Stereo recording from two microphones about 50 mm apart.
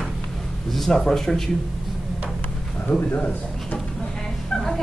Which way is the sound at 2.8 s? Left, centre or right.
Left.